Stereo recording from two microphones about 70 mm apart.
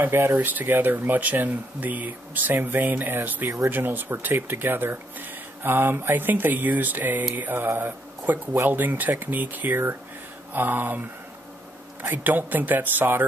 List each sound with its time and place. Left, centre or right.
0.0 s speech: right